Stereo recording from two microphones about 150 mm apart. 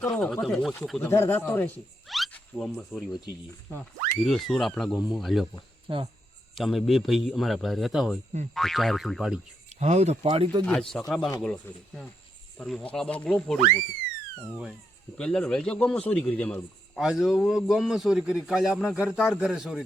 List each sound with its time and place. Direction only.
0.0 s a man's voice: 5° left (ahead or behind)
2.0 s a sound: centre (ahead or behind)
2.3 s a man's voice: centre (ahead or behind)
5.9 s speech: 35° right (ahead or behind)
6.6 s a man's voice: centre (ahead or behind)
9.8 s speech: 45° right (ahead or behind)
10.2 s speech: 35° right (ahead or behind)
10.7 s a man's voice: 5° left (ahead or behind)
15.2 s a man's voice: 5° left (ahead or behind)
17.0 s a man's voice: 5° right (ahead or behind)